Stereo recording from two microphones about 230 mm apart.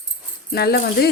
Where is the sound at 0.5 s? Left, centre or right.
Left.